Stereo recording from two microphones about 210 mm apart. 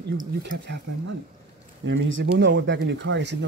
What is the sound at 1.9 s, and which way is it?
Speech, 55° right (ahead or behind).